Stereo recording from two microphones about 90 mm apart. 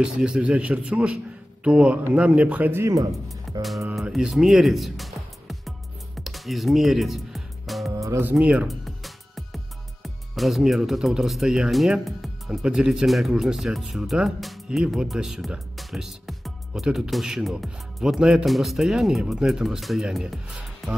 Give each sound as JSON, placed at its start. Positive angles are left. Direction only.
{"t": 0.0, "sound": "a man's voice", "side_deg": -10}
{"t": 2.8, "sound": "speech", "side_deg": -35}
{"t": 3.5, "sound": "music", "side_deg": 0}
{"t": 7.9, "sound": "music", "side_deg": -35}
{"t": 8.2, "sound": "a man's voice", "side_deg": -15}
{"t": 8.6, "sound": "music", "side_deg": 0}
{"t": 10.0, "sound": "speech", "side_deg": 0}